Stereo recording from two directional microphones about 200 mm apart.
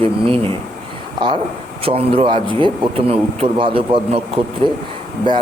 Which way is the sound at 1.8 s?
30° right (ahead or behind).